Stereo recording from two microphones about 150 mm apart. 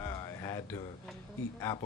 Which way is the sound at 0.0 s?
25° left (ahead or behind).